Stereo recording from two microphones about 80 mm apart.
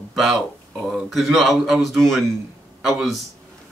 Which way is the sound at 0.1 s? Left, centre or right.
Centre.